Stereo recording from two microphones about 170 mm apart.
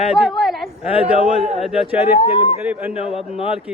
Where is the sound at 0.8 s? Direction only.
35° left (ahead or behind).